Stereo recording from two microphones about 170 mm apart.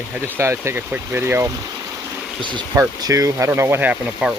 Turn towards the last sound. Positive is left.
turn(degrees=-10)  # may be behind; listen again after turning